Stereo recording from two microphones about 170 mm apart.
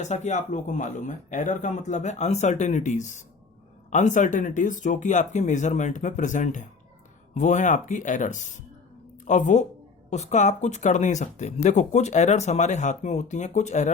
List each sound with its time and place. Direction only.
0.0 s speech: 45° left (ahead or behind)